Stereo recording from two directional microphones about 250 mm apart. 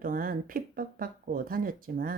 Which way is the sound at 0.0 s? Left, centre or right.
Right.